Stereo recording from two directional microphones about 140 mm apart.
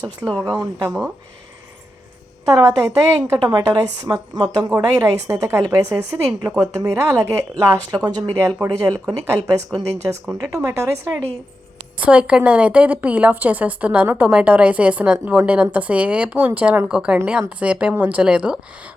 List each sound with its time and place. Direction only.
0.3 s speech: 10° left (ahead or behind)
0.5 s a woman's voice: 15° right (ahead or behind)
2.5 s a woman's voice: 20° right (ahead or behind); by 18.6 s 5° right (ahead or behind)